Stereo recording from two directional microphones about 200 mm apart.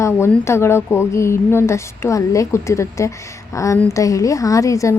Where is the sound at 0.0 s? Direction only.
15° left (ahead or behind).